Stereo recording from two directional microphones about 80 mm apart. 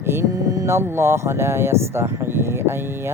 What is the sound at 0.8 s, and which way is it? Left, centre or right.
Speech, right.